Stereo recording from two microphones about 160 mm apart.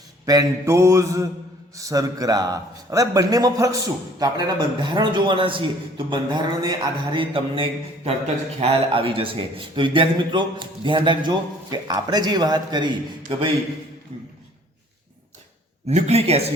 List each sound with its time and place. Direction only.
0.3 s a man's voice: 20° right (ahead or behind)
15.9 s speech: 45° right (ahead or behind)